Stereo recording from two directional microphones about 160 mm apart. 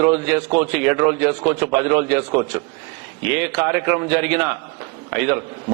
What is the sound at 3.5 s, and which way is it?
Speech, 15° right (ahead or behind).